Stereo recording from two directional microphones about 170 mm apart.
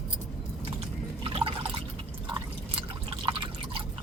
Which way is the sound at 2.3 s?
30° right (ahead or behind).